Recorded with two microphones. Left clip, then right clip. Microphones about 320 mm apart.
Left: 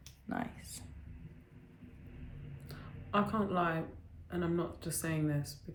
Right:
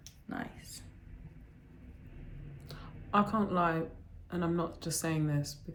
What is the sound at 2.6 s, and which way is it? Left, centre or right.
Whispering, centre.